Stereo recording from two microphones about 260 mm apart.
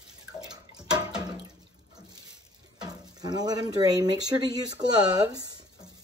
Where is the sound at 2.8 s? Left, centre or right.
Centre.